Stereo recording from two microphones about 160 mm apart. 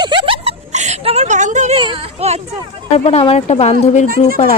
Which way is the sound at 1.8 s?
35° right (ahead or behind).